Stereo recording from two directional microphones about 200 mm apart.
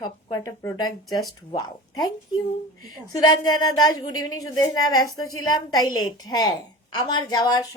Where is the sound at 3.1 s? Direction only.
20° left (ahead or behind).